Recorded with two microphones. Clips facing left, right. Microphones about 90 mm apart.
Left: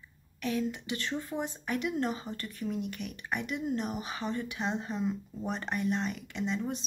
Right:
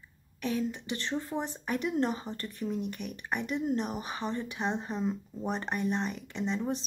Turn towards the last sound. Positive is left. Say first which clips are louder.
# right 1 dB
turn(degrees=-25)  # may be behind; listen again after turning